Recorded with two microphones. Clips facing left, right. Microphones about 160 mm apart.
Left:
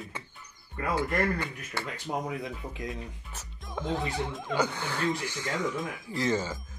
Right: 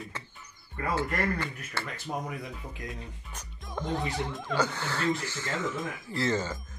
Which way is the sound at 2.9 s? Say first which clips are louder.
Left 3 dB; centre (ahead or behind).